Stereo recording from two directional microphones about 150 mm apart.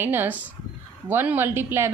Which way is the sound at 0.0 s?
15° right (ahead or behind).